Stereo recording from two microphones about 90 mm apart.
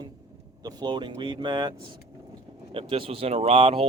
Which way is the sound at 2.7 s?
90° right.